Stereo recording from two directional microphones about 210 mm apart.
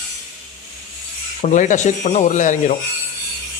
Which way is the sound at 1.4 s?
35° left (ahead or behind).